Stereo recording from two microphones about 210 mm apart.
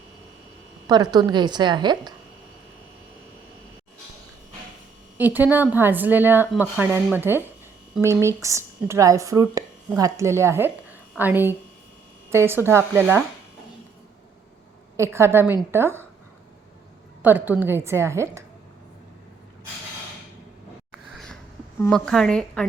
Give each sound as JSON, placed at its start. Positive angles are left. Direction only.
{"t": 1.1, "sound": "a woman's voice", "side_deg": -20}
{"t": 5.1, "sound": "speech", "side_deg": -10}
{"t": 14.9, "sound": "speech", "side_deg": -10}
{"t": 17.2, "sound": "speech", "side_deg": -10}
{"t": 20.9, "sound": "a sound", "side_deg": 0}
{"t": 21.8, "sound": "a woman's voice", "side_deg": 5}